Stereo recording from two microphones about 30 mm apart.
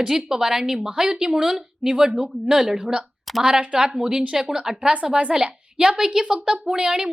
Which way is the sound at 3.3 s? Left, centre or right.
Centre.